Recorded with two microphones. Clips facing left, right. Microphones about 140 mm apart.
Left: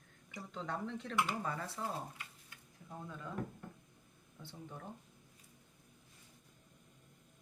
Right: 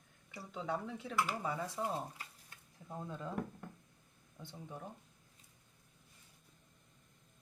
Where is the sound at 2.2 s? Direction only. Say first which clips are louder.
Even; 30° right (ahead or behind).